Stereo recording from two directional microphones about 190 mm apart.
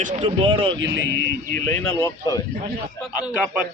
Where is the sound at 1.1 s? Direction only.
65° left (ahead or behind).